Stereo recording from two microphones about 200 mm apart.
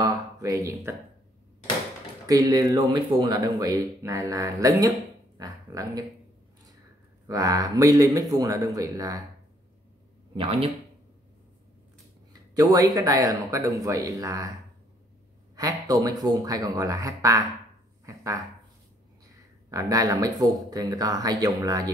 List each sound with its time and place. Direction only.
0.0 s a sound: 15° right (ahead or behind)
2.2 s a man's voice: 15° right (ahead or behind)
7.2 s a man's voice: 20° right (ahead or behind)
10.3 s speech: 30° right (ahead or behind)
12.3 s a man's voice: 20° right (ahead or behind)
15.5 s a man's voice: 15° right (ahead or behind)
18.0 s dog: 15° right (ahead or behind)
19.7 s a man's voice: 15° right (ahead or behind)